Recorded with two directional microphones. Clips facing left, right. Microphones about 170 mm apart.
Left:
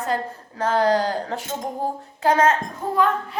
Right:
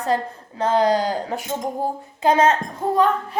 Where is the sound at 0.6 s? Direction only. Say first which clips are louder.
Right 1 dB; 20° right (ahead or behind).